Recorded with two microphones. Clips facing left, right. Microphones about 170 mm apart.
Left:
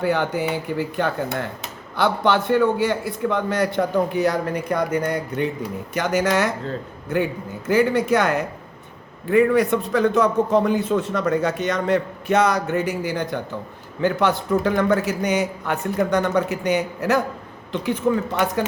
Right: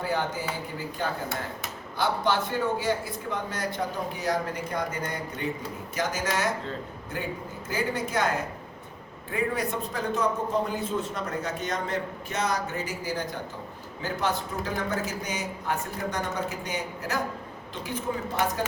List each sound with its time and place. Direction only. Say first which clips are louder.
0.0 s a man's voice: left 8 dB; 70° left (ahead or behind)